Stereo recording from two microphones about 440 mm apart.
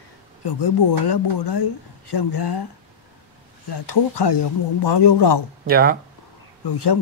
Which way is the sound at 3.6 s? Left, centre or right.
Left.